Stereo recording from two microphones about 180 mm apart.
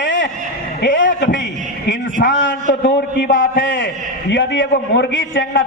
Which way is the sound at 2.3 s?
90° left.